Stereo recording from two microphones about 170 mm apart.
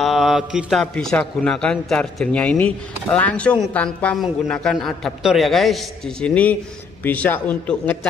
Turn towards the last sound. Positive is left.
turn(degrees=10)  # may be behind; listen again after turning